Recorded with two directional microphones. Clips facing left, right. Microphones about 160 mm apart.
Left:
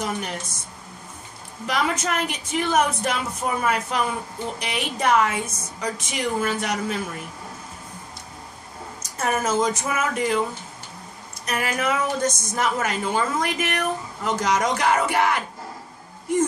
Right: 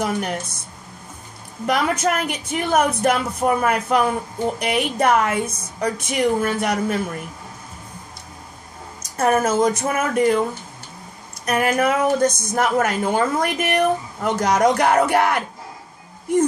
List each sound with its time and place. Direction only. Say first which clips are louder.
0.0 s a woman's voice: right 5 dB; 50° right (ahead or behind)
1.7 s a woman's voice: right 4 dB; 50° right (ahead or behind)
9.2 s a woman's voice: right 5 dB; 50° right (ahead or behind)
11.4 s a woman's voice: right 6 dB; 50° right (ahead or behind)